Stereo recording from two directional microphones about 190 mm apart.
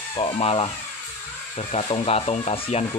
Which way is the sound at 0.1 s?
30° left (ahead or behind).